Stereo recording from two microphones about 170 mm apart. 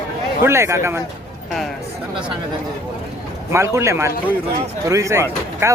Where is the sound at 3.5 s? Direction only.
15° right (ahead or behind).